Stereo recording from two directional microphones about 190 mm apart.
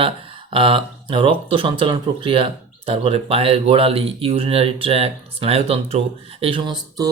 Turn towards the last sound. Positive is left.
turn(degrees=-25)  # may be behind; listen again after turning